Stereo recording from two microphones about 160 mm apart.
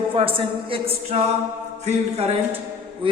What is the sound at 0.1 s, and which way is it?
A woman's voice, 35° right (ahead or behind).